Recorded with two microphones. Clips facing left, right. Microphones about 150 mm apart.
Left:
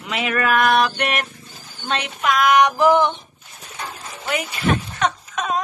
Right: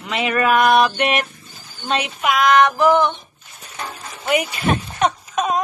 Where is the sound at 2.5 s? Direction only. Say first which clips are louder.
Right 1 dB; 15° left (ahead or behind).